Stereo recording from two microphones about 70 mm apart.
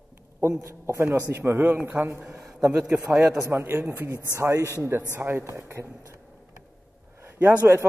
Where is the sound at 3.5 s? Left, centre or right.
Right.